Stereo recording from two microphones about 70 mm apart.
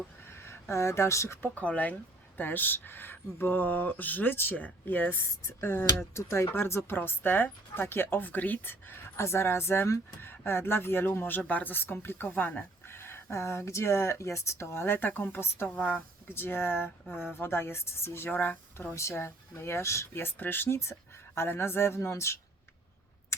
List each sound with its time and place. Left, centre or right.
0.3 s speech: left
1.4 s speech: left
18.9 s speech: left